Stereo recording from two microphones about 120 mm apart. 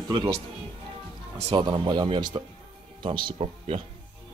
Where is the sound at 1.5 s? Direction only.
40° right (ahead or behind).